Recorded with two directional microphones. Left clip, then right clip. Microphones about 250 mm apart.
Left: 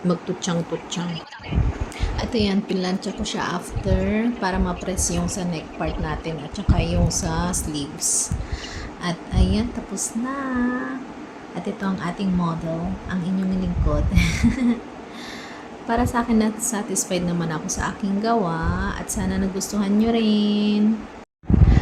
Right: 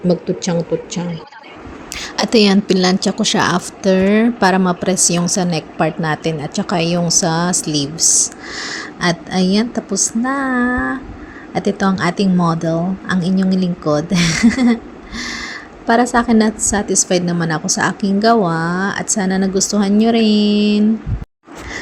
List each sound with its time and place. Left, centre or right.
0.1 s speech: centre
2.0 s a woman's voice: right